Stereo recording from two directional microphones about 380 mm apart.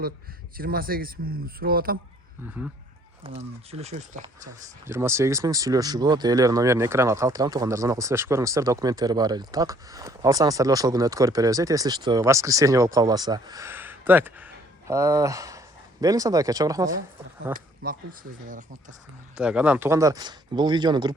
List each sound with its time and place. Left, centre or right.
0.5 s speech: right
3.2 s speech: centre
4.4 s speech: centre
17.5 s speech: right
19.4 s speech: centre